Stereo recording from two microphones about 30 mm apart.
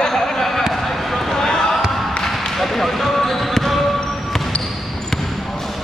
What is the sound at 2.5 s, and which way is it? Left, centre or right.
Basketball bounce, centre.